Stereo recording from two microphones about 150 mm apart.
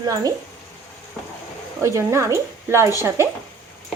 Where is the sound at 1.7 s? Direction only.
20° right (ahead or behind).